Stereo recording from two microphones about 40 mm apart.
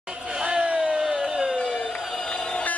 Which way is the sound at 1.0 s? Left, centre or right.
Centre.